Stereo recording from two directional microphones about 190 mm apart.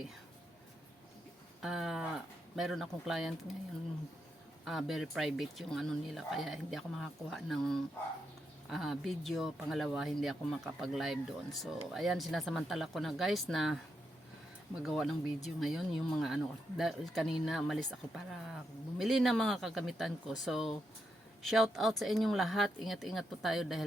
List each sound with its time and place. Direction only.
1.6 s speech: centre (ahead or behind)
4.6 s speech: centre (ahead or behind)
14.8 s speech: centre (ahead or behind)